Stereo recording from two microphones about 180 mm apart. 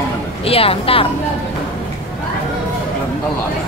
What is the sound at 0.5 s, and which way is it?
Speech, 30° left (ahead or behind).